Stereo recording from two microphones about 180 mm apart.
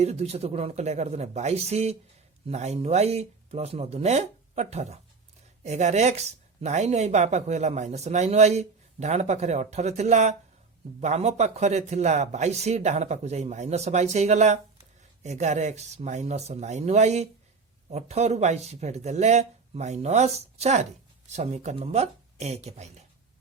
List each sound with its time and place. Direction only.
0.0 s speech: 35° right (ahead or behind)